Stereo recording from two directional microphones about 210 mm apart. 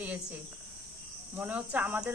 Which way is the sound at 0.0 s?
5° right (ahead or behind).